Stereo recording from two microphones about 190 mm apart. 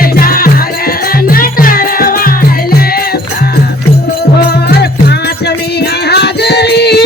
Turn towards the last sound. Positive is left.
turn(degrees=60)  # may be behind; listen again after turning